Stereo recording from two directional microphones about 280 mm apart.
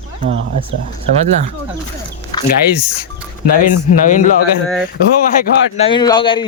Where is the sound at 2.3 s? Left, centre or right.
Centre.